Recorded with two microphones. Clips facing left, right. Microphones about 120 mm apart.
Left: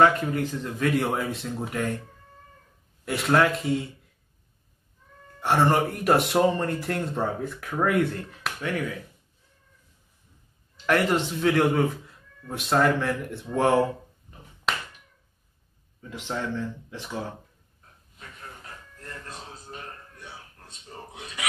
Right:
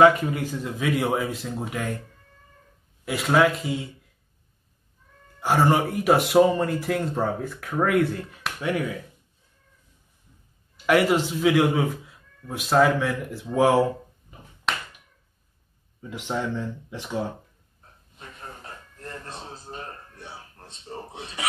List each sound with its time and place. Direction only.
0.0 s speech: 10° right (ahead or behind)
3.1 s speech: centre (ahead or behind)
5.4 s speech: centre (ahead or behind)
10.9 s speech: 5° right (ahead or behind)
16.0 s speech: 15° right (ahead or behind)
18.2 s a sound: 30° right (ahead or behind)